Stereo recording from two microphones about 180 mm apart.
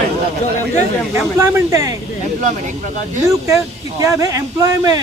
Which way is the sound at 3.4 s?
15° right (ahead or behind).